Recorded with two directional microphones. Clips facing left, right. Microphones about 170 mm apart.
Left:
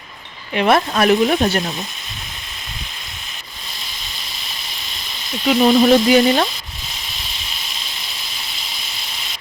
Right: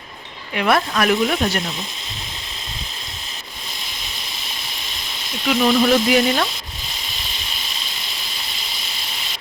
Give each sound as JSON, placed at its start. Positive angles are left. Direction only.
{"t": 0.5, "sound": "frying", "side_deg": 30}
{"t": 5.5, "sound": "frying", "side_deg": 25}